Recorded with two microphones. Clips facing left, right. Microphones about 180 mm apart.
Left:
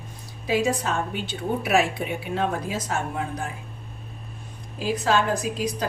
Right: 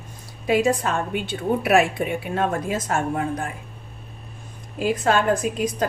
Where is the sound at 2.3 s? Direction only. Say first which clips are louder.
Right 1 dB; 50° right (ahead or behind).